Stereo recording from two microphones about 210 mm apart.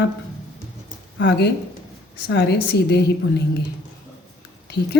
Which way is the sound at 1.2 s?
55° left (ahead or behind).